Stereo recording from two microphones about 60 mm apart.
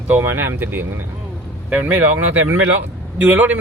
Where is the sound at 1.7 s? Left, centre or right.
Right.